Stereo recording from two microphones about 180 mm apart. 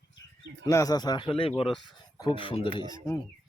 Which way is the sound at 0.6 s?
20° left (ahead or behind).